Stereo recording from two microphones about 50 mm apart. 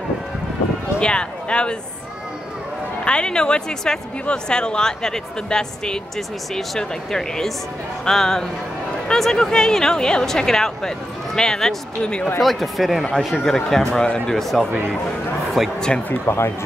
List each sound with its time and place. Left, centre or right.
1.0 s speech: centre
3.1 s a woman's voice: centre
12.4 s speech: centre
13.7 s a woman's voice: centre
14.0 s speech: centre
14.3 s speech: centre
16.3 s speech: left